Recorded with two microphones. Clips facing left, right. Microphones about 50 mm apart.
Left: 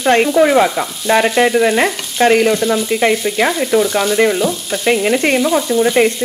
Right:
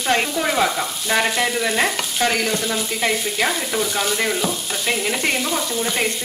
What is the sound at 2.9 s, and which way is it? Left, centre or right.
Speech, left.